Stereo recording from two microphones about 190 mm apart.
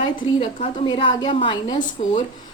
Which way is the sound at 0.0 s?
25° left (ahead or behind).